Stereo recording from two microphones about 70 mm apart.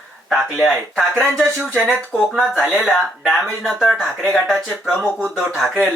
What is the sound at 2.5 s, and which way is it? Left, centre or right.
Speech, centre.